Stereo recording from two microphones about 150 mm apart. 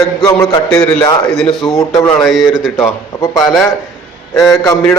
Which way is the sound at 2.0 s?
20° left (ahead or behind).